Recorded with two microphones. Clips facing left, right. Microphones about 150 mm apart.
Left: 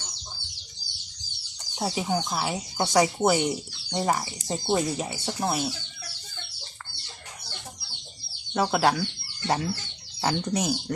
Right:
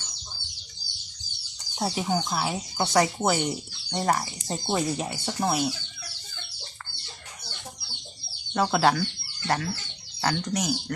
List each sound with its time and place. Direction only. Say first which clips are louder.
1.8 s speech: even; centre (ahead or behind)
8.5 s speech: right 1 dB; 5° left (ahead or behind)
10.2 s speech: left 1 dB; 10° left (ahead or behind)
10.5 s speech: left 1 dB; 25° left (ahead or behind)